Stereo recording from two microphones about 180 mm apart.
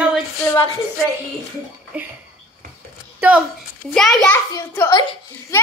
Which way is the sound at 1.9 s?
5° right (ahead or behind).